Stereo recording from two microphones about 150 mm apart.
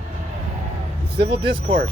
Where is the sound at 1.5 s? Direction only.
60° right (ahead or behind).